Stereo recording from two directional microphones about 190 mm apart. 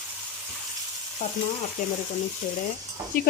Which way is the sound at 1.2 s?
35° left (ahead or behind).